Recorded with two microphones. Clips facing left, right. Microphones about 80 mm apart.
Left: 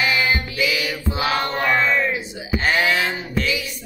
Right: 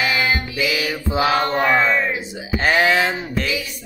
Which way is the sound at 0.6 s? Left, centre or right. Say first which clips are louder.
Right 1 dB; centre.